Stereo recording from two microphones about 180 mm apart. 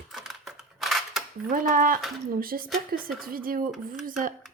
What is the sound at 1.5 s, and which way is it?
Speech, 50° right (ahead or behind).